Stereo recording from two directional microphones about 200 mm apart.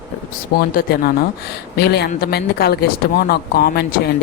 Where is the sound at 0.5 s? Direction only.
50° left (ahead or behind).